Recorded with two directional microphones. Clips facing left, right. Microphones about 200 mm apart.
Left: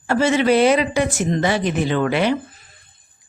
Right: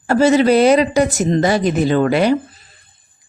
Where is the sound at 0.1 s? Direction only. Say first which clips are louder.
Right 4 dB; 40° right (ahead or behind).